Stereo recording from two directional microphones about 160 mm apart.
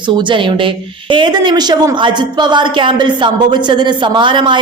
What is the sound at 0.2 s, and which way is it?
A woman's voice, 30° right (ahead or behind).